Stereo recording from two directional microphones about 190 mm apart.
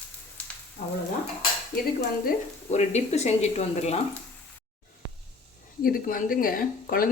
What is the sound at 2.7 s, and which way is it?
Speech, 35° left (ahead or behind).